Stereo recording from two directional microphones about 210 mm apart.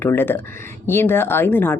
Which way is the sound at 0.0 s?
10° left (ahead or behind).